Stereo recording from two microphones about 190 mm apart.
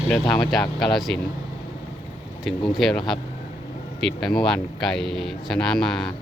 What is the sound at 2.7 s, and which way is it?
Speech, centre (ahead or behind).